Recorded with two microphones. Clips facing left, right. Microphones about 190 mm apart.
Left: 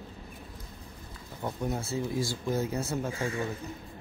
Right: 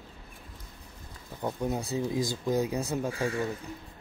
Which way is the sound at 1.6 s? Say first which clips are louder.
Right 1 dB; 15° right (ahead or behind).